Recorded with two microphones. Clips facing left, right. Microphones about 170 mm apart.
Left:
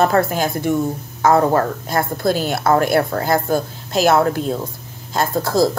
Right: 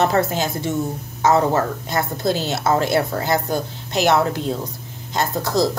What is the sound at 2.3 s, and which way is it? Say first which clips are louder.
Speech: left 2 dB; 20° right (ahead or behind).